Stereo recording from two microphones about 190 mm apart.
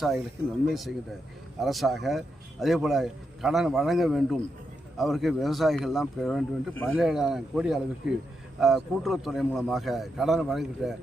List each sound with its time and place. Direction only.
0.7 s speech: centre (ahead or behind)